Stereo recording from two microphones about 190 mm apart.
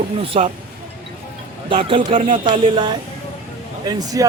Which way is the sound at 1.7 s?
25° right (ahead or behind).